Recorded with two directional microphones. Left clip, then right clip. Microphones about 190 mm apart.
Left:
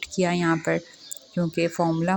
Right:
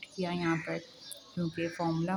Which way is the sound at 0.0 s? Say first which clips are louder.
Left 10 dB; 35° left (ahead or behind).